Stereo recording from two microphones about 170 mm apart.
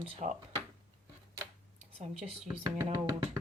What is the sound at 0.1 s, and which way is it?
Speech, 40° right (ahead or behind).